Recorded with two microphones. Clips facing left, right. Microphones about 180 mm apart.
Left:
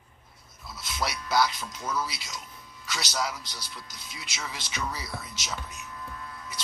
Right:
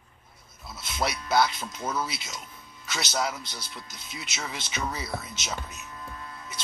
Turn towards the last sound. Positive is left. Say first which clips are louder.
# even
turn(degrees=-25)  # may be behind; listen again after turning